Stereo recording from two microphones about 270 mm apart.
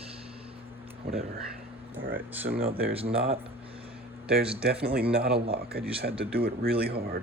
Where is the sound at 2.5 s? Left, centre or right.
Right.